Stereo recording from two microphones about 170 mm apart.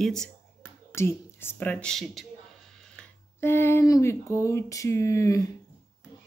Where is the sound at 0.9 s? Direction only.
15° left (ahead or behind).